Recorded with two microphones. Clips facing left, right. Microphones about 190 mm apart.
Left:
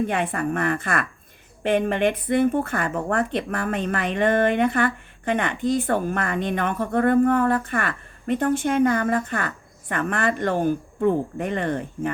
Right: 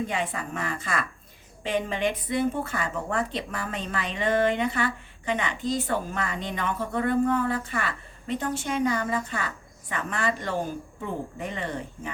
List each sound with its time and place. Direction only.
0.0 s speech: 60° left (ahead or behind)